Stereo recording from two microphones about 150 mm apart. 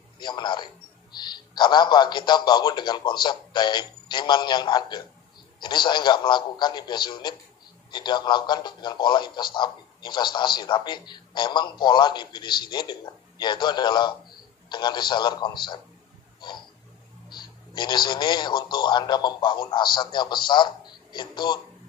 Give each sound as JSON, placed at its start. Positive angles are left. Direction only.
{"t": 0.2, "sound": "a man's voice", "side_deg": 30}
{"t": 16.3, "sound": "a sound", "side_deg": 30}
{"t": 17.3, "sound": "a man's voice", "side_deg": 30}